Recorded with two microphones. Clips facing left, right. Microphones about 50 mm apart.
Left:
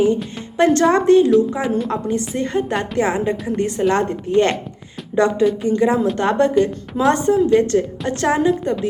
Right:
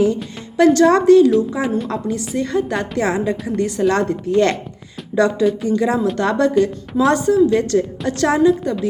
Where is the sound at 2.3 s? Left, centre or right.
Left.